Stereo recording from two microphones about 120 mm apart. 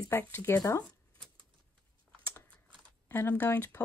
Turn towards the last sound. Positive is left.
turn(degrees=20)  # may be behind; listen again after turning